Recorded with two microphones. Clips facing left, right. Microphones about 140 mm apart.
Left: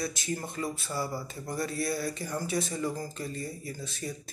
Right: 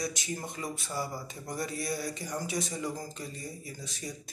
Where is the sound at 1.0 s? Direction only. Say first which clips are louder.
Left 2 dB; 20° right (ahead or behind).